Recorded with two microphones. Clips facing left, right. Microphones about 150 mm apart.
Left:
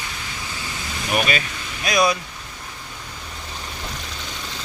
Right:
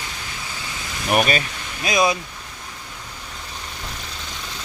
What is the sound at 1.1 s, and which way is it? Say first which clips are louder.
Speech: right 3 dB; 40° right (ahead or behind).